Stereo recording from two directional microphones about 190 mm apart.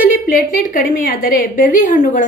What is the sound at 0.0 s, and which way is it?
A woman's voice, 50° left (ahead or behind).